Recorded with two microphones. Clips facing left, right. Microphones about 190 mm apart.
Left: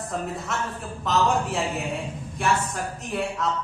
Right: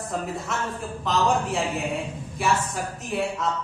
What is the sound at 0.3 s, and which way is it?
Speech, centre (ahead or behind).